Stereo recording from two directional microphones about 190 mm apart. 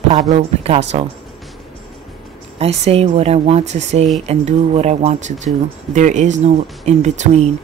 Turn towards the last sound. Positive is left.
turn(degrees=-35)  # may be behind; listen again after turning